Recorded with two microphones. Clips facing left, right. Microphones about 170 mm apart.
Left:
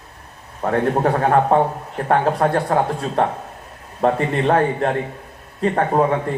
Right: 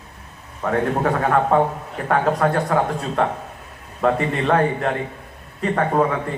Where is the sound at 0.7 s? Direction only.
35° left (ahead or behind).